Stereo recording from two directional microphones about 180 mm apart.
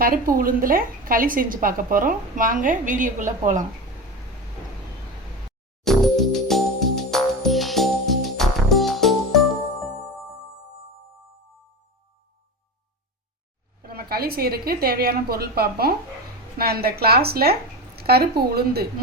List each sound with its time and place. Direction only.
0.0 s a woman's voice: 50° right (ahead or behind)
5.8 s music: centre (ahead or behind)
13.8 s a woman's voice: 60° right (ahead or behind)